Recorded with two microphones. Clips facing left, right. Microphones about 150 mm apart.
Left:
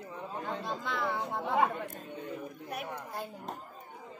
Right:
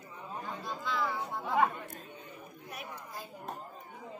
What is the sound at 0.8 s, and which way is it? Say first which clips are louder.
Speech: right 3 dB; 60° left (ahead or behind).